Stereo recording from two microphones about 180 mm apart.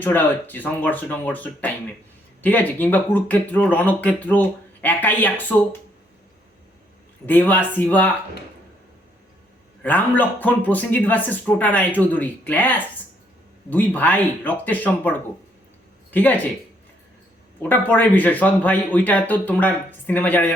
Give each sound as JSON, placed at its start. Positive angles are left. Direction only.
{"t": 0.0, "sound": "speech", "side_deg": 10}
{"t": 7.3, "sound": "speech", "side_deg": 10}
{"t": 9.8, "sound": "speech", "side_deg": 10}
{"t": 16.1, "sound": "speech", "side_deg": 10}
{"t": 17.6, "sound": "speech", "side_deg": 10}